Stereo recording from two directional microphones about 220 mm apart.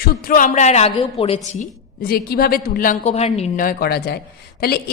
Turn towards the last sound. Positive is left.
turn(degrees=45)  # may be behind; listen again after turning